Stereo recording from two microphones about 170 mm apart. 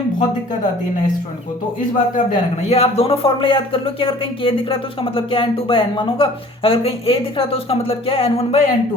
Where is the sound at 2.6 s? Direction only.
40° left (ahead or behind).